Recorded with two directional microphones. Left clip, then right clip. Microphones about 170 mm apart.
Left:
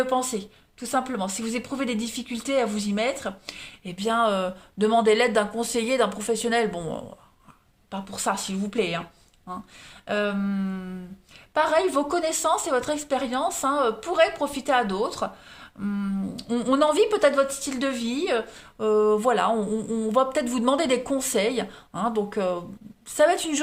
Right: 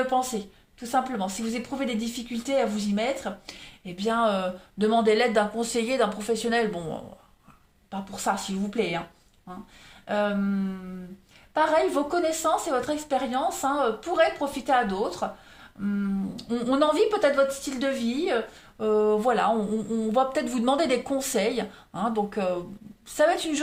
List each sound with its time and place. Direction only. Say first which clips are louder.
0.0 s speech: left 1 dB; 50° left (ahead or behind)
7.9 s speech: left 1 dB; 50° left (ahead or behind)
10.1 s speech: even; 50° left (ahead or behind)